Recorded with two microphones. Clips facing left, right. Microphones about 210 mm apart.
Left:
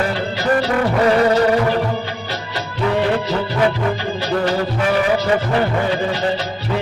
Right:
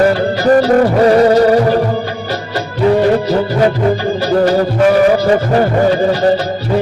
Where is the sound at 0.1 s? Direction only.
45° right (ahead or behind).